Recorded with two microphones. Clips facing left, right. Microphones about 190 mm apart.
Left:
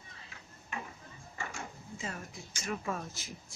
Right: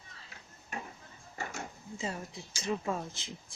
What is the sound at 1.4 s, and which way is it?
Speech, 35° right (ahead or behind).